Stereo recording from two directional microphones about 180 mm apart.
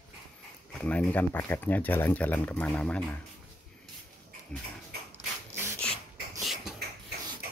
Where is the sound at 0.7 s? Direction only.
5° left (ahead or behind).